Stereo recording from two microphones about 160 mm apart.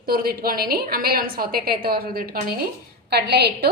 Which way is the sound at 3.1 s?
90° right.